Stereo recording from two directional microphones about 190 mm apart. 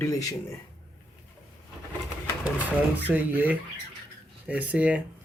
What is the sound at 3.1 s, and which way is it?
Speech, 10° right (ahead or behind).